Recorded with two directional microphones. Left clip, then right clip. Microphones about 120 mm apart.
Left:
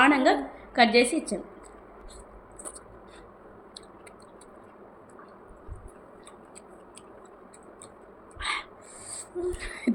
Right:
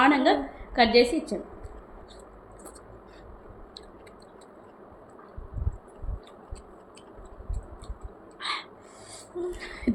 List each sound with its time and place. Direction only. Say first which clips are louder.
0.0 s a woman's voice: even; 20° left (ahead or behind)
8.4 s crow: left 1 dB; 25° left (ahead or behind)
9.5 s a sound: left 2 dB; 20° left (ahead or behind)